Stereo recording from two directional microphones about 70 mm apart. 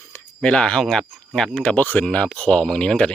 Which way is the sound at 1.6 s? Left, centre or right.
Left.